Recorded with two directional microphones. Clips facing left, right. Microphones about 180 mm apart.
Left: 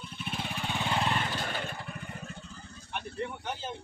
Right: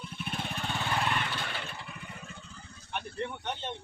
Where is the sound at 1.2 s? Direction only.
40° left (ahead or behind).